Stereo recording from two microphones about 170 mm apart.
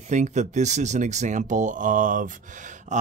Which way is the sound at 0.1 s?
45° right (ahead or behind).